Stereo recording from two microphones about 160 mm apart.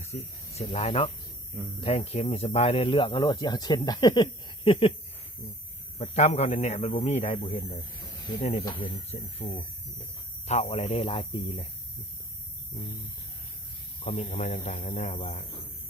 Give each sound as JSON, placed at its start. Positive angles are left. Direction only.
{"t": 0.0, "sound": "speech", "side_deg": 40}
{"t": 6.0, "sound": "speech", "side_deg": 45}
{"t": 9.4, "sound": "speech", "side_deg": 35}
{"t": 14.0, "sound": "speech", "side_deg": 45}